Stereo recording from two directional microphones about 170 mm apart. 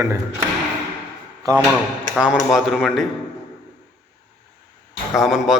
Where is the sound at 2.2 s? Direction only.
5° right (ahead or behind).